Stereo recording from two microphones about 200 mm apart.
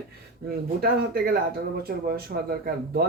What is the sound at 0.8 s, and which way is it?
Speech, 50° right (ahead or behind).